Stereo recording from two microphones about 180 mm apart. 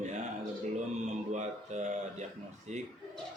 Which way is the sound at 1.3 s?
40° right (ahead or behind).